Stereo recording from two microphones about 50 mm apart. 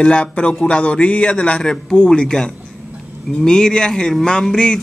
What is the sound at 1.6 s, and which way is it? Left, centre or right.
A man's voice, centre.